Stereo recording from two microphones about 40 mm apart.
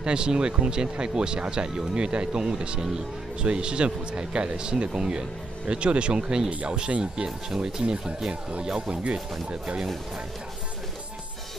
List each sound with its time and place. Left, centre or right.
0.0 s speech: right
8.3 s speech: right